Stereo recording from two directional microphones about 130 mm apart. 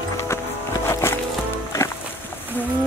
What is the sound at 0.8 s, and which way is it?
Music, 20° left (ahead or behind).